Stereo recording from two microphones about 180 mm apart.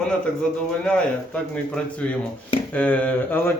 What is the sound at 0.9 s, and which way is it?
A man's voice, 5° left (ahead or behind).